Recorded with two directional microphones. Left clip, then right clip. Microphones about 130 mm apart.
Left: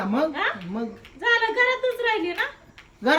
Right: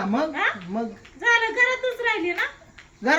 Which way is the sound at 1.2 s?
15° left (ahead or behind).